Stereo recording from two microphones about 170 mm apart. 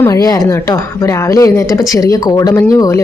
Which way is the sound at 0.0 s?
20° left (ahead or behind).